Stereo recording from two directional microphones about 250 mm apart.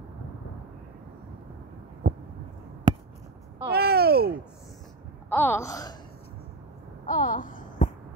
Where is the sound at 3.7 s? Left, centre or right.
Right.